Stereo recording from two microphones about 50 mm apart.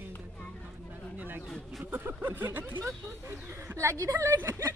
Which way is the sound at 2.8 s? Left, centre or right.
Right.